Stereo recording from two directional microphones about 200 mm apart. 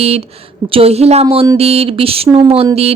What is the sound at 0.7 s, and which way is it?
Speech, 30° right (ahead or behind).